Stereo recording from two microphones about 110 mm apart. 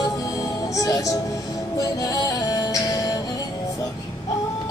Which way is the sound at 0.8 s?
30° left (ahead or behind).